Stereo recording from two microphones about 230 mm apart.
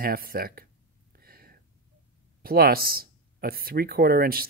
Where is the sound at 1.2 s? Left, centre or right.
Right.